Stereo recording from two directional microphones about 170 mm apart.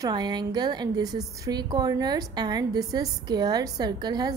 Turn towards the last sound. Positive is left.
turn(degrees=-25)  # may be behind; listen again after turning